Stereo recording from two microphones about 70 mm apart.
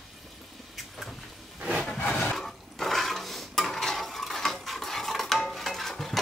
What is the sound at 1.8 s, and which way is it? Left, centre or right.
Wood, centre.